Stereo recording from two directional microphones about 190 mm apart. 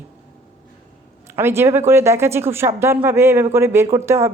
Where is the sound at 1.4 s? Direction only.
10° right (ahead or behind).